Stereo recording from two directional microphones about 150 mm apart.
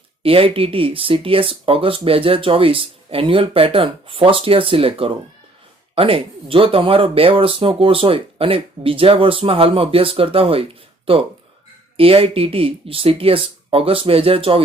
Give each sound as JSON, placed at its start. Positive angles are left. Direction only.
{"t": 0.2, "sound": "speech", "side_deg": -40}